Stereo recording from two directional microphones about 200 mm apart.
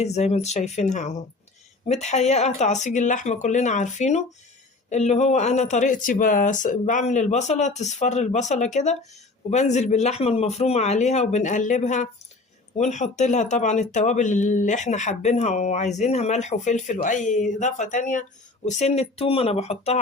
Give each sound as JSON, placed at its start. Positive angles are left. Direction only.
{"t": 0.0, "sound": "speech", "side_deg": 35}